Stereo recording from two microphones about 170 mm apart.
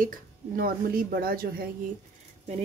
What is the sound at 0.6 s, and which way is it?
Speech, 65° right (ahead or behind).